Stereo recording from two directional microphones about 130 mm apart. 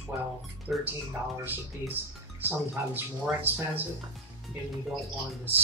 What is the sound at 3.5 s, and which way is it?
Speech, 15° right (ahead or behind).